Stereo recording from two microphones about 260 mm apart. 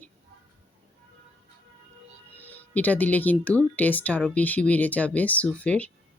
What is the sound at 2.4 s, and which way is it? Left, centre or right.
Speech, centre.